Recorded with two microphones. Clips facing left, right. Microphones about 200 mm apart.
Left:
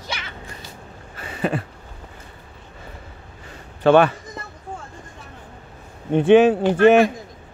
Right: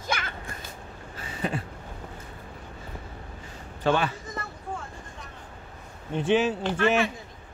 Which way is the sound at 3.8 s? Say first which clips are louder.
Left 10 dB; 65° left (ahead or behind).